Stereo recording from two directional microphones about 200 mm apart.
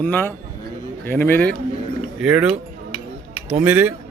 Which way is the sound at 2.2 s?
5° right (ahead or behind).